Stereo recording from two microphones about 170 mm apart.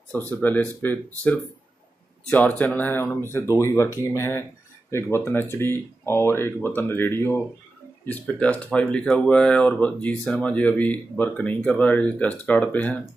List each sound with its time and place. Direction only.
0.1 s speech: 10° left (ahead or behind)